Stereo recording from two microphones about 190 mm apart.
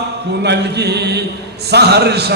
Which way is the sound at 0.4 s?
65° right (ahead or behind).